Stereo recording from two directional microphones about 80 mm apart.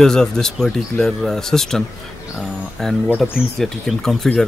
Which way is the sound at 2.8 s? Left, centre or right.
Centre.